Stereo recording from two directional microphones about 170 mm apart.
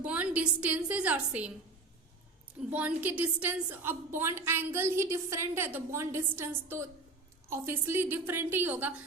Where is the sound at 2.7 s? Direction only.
10° right (ahead or behind).